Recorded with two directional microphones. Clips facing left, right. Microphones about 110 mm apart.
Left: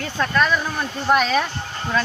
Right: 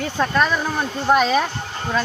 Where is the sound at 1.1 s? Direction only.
15° right (ahead or behind).